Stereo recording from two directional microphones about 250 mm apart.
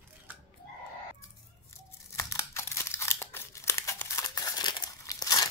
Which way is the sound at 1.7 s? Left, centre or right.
Centre.